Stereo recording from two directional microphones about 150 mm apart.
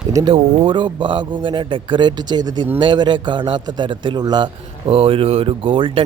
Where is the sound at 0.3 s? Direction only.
35° right (ahead or behind).